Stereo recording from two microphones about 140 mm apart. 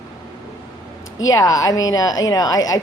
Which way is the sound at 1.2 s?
25° left (ahead or behind).